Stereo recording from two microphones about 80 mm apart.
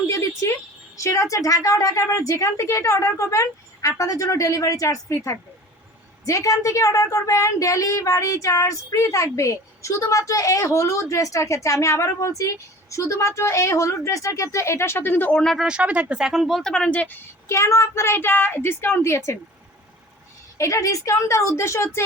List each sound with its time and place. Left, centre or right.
0.1 s a sound: left
0.9 s a woman's voice: left
15.4 s speech: centre
15.6 s speech: centre
16.7 s speech: centre
17.5 s speech: left
20.6 s speech: left